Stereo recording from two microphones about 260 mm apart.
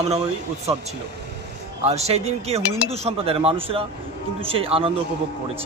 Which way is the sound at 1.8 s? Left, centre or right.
Right.